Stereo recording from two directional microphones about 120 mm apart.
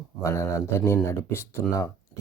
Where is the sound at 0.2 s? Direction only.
25° left (ahead or behind).